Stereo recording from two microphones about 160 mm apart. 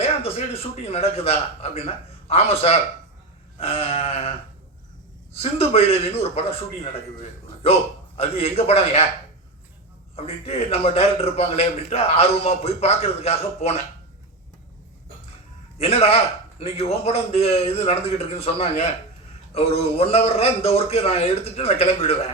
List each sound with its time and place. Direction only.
0.0 s a man's voice: 40° left (ahead or behind)
10.2 s a man's voice: 40° left (ahead or behind)
15.8 s a man's voice: 40° left (ahead or behind)